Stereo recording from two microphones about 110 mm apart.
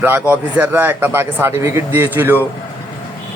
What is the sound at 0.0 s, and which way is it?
Speech, 15° right (ahead or behind).